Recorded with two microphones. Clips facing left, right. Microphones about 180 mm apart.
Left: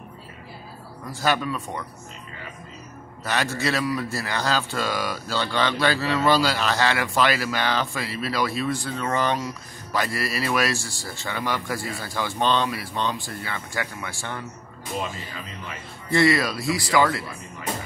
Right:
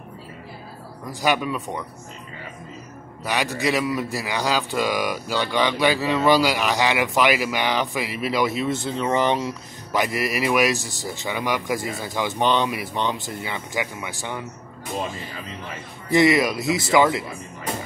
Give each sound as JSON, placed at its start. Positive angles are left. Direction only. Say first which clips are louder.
{"t": 1.2, "sound": "a man's voice", "louder": "right 2 dB", "side_deg": -15}
{"t": 3.3, "sound": "a man's voice", "louder": "right 2 dB", "side_deg": -15}
{"t": 16.1, "sound": "speech", "louder": "right 3 dB", "side_deg": -20}